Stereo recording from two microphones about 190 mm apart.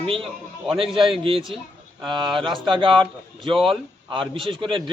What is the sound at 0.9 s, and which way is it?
Speech, centre (ahead or behind).